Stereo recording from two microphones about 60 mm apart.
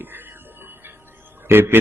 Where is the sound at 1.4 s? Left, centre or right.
Right.